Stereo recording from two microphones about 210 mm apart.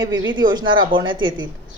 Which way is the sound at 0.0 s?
20° right (ahead or behind).